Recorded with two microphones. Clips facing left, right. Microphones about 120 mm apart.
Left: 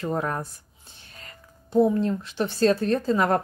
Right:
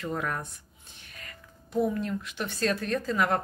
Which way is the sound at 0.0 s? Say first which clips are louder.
Left 5 dB; 35° left (ahead or behind).